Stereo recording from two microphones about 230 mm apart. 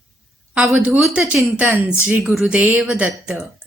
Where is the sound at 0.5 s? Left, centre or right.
Centre.